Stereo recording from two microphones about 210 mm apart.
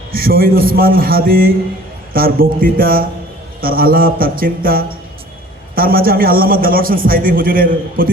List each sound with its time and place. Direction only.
0.1 s a man's voice: 45° right (ahead or behind)